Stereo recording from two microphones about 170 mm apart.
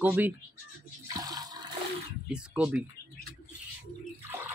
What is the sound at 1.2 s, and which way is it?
Water, 25° right (ahead or behind).